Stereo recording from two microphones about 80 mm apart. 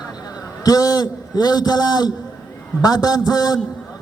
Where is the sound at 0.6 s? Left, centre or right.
Left.